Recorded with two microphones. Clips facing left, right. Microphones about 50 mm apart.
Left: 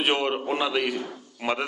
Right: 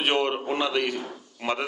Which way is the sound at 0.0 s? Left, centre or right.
Centre.